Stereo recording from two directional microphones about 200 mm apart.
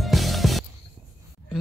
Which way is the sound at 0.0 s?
Centre (ahead or behind).